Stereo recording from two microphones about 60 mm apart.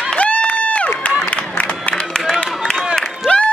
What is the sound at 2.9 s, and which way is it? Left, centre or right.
Crowd, centre.